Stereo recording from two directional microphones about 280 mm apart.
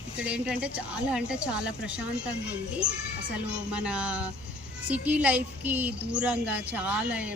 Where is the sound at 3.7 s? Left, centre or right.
Centre.